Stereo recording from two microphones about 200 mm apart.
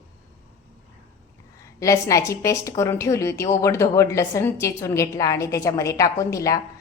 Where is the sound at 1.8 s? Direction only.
15° left (ahead or behind).